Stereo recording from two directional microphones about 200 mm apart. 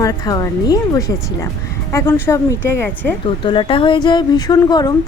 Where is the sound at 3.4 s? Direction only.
25° left (ahead or behind).